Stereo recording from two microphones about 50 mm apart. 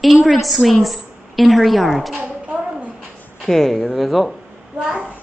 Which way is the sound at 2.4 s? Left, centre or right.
Right.